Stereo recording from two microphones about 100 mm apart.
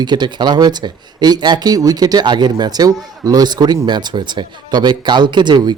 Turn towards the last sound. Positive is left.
turn(degrees=-45)  # may be behind; listen again after turning